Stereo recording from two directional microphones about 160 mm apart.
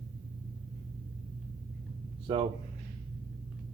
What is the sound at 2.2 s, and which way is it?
Speech, 35° right (ahead or behind).